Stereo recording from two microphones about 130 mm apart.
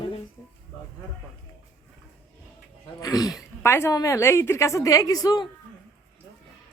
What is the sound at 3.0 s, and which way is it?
A woman's voice, 30° left (ahead or behind).